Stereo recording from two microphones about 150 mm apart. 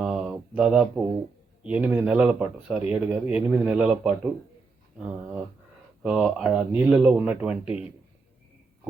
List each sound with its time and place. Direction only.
0.0 s a sound: 5° right (ahead or behind)
1.6 s speech: 10° right (ahead or behind)
6.0 s speech: 5° right (ahead or behind)